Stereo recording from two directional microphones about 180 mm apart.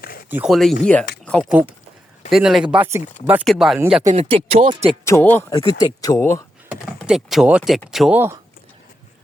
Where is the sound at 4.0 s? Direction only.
40° right (ahead or behind).